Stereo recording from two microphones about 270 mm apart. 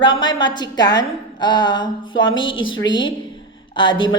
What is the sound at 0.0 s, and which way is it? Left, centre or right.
A woman's voice, centre.